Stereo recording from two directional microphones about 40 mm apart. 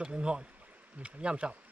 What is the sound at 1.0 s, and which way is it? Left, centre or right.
Speech, right.